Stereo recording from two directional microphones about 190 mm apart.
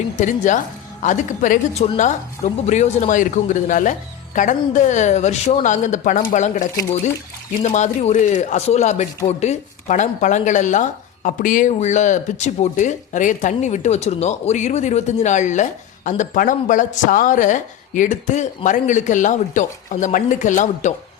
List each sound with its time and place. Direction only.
0.2 s speech: 40° left (ahead or behind)